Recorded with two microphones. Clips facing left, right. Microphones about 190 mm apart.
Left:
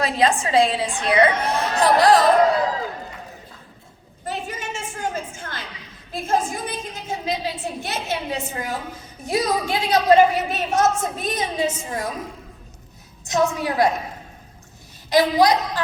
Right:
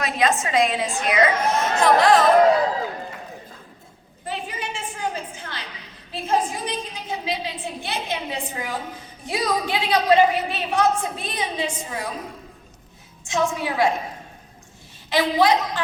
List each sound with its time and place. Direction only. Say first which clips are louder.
0.0 s a woman's voice: left 2 dB; 30° left (ahead or behind)
4.3 s a sound: left 1 dB; 45° left (ahead or behind)
6.1 s a woman's voice: left 1 dB; 45° left (ahead or behind)
13.2 s a woman's voice: left 2 dB; 40° left (ahead or behind)
15.1 s a woman's voice: left 2 dB; 40° left (ahead or behind)